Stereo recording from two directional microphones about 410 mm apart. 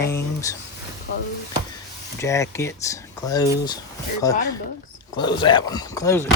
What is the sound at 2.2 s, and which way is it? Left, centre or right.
Speech, centre.